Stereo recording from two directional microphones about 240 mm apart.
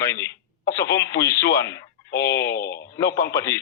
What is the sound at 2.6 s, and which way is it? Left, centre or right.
Speech, left.